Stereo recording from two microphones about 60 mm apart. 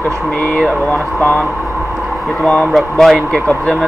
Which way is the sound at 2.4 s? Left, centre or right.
Centre.